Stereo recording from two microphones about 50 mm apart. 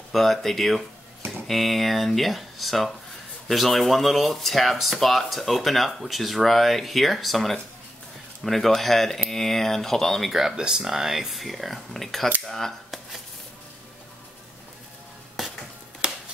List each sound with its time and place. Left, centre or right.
0.1 s speech: centre
10.3 s speech: centre
15.4 s a sound: centre
16.0 s chopping: centre